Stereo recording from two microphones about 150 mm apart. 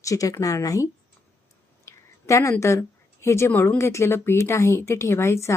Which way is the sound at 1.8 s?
20° left (ahead or behind).